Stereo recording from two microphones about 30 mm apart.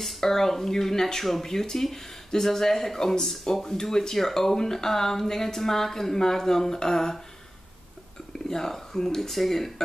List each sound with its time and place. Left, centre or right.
0.2 s speech: centre
8.5 s speech: centre